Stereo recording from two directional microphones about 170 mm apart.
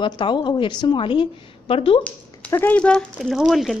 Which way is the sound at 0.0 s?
30° left (ahead or behind).